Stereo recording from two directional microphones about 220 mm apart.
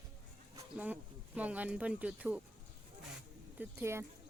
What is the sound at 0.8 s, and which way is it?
Speech, 5° right (ahead or behind).